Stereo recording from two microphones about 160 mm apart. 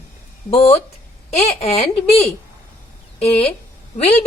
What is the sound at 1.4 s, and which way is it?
Speech, 45° left (ahead or behind).